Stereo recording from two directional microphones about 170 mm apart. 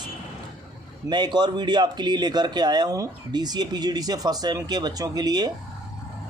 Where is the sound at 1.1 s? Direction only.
25° right (ahead or behind).